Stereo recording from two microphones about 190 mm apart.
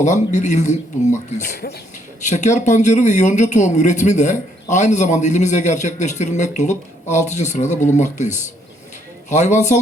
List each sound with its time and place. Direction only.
0.0 s speech: 40° left (ahead or behind)